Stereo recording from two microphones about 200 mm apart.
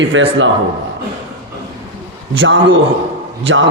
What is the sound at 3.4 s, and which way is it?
Speech, 70° right (ahead or behind).